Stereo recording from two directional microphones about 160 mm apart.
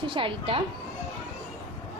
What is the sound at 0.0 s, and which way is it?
Speech, 30° right (ahead or behind).